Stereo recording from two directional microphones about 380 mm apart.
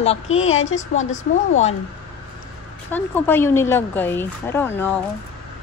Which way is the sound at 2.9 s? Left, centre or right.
Centre.